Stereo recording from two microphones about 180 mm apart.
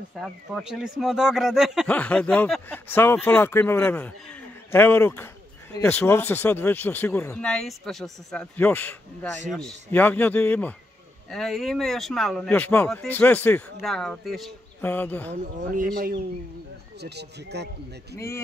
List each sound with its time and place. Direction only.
0.2 s speech: centre (ahead or behind)
17.0 s speech: 65° right (ahead or behind)
18.1 s speech: 15° left (ahead or behind)